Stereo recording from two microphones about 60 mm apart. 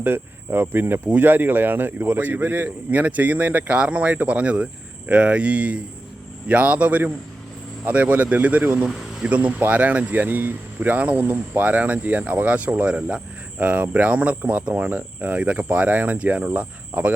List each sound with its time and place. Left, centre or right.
0.0 s speech: right